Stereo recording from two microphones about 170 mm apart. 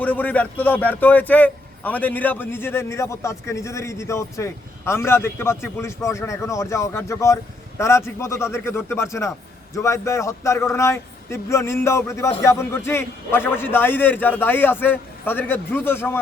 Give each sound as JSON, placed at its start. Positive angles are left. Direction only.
{"t": 0.0, "sound": "a man's voice", "side_deg": 10}